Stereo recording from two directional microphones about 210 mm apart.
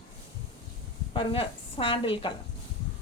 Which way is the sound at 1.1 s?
25° left (ahead or behind).